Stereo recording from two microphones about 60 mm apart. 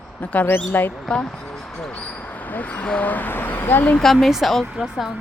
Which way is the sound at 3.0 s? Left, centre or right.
Left.